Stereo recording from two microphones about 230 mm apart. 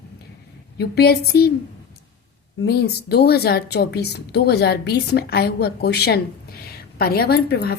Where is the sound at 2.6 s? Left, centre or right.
Left.